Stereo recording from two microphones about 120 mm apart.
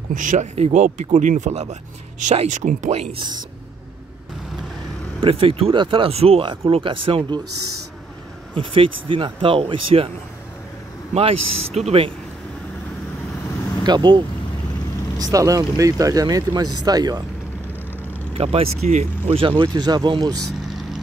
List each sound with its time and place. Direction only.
0.1 s speech: 90° right; by 3.2 s 65° right (ahead or behind)
5.2 s speech: 50° right (ahead or behind)
8.5 s speech: 45° right (ahead or behind)
11.1 s speech: 60° right (ahead or behind)
13.8 s speech: 35° right (ahead or behind)
18.3 s speech: 55° right (ahead or behind); by 19.3 s 70° right (ahead or behind)
19.3 s speech: 45° right (ahead or behind)